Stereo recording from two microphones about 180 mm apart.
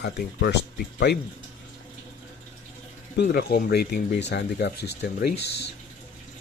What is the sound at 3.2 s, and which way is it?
Speech, 60° left (ahead or behind).